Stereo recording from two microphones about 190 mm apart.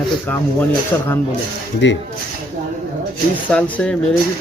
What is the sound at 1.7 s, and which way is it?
Speech, 70° left (ahead or behind).